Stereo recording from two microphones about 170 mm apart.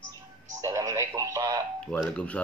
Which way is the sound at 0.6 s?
20° right (ahead or behind).